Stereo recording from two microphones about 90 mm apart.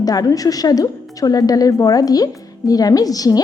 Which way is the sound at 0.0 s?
45° left (ahead or behind).